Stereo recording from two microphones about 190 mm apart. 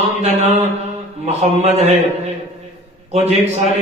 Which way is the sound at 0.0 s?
35° right (ahead or behind).